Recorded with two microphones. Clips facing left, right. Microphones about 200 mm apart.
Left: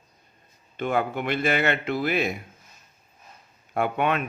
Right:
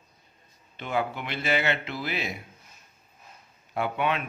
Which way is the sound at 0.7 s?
50° left (ahead or behind).